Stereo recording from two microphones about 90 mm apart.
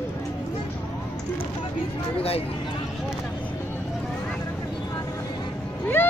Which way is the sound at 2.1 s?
90° left.